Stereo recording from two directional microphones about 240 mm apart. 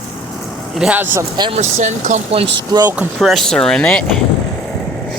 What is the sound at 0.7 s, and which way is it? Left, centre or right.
Speech, centre.